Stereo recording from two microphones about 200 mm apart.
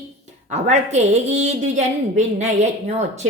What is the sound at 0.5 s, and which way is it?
A woman's voice, 35° right (ahead or behind).